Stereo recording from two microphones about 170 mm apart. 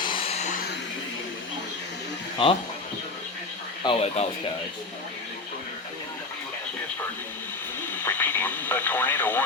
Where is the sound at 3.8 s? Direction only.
35° left (ahead or behind).